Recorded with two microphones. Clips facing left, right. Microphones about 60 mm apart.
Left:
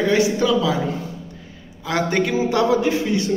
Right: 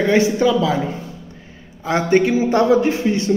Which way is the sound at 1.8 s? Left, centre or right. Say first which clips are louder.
Right 5 dB; right.